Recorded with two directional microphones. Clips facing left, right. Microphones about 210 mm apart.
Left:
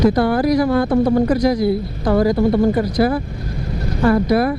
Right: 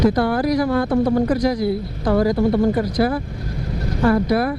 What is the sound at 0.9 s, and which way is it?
Speech, 25° left (ahead or behind).